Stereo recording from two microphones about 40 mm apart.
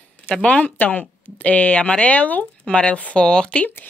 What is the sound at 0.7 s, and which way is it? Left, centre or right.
Speech, left.